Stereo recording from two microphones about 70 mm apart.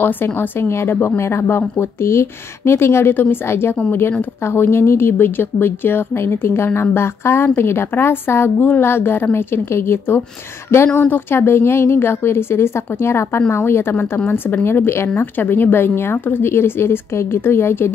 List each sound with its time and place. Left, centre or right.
0.0 s speech: left